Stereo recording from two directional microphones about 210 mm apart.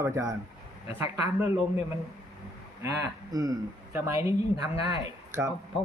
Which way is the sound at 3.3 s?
15° right (ahead or behind).